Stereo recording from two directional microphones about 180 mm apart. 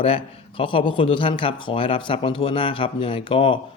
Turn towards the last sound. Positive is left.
turn(degrees=30)  # may be behind; listen again after turning